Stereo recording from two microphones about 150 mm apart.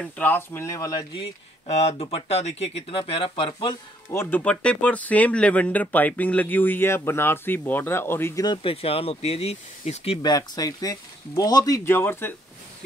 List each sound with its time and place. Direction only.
0.0 s speech: 15° left (ahead or behind)
1.7 s speech: 45° left (ahead or behind)
4.1 s speech: 15° left (ahead or behind)
8.5 s speech: 40° left (ahead or behind)
10.2 s speech: 25° left (ahead or behind)